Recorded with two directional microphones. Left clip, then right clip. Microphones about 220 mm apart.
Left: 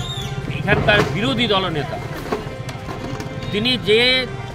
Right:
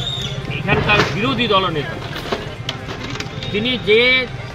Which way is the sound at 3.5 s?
20° left (ahead or behind).